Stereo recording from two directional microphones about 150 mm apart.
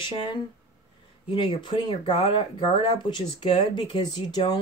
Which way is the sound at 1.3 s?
35° left (ahead or behind).